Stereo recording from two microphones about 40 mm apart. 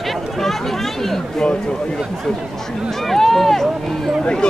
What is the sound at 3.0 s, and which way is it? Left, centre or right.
Speech, centre.